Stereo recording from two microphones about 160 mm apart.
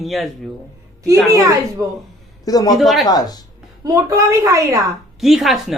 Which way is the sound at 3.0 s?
25° left (ahead or behind).